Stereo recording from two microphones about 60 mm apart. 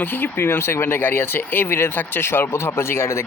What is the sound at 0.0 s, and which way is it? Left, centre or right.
Speech, left.